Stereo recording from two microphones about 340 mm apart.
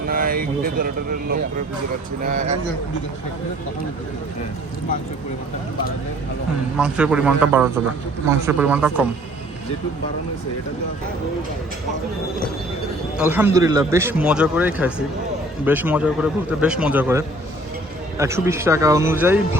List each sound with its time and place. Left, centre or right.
0.1 s a sound: right
2.2 s speech: right
6.7 s a man's voice: centre
13.1 s a man's voice: centre